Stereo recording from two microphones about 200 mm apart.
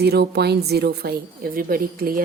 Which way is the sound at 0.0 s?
55° right (ahead or behind).